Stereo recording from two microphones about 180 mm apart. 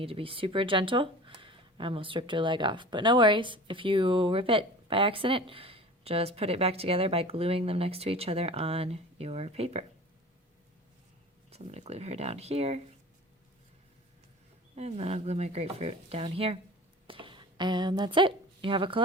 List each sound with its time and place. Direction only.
0.0 s speech: 30° right (ahead or behind)
11.5 s speech: 35° right (ahead or behind)
14.8 s a woman's voice: 35° right (ahead or behind)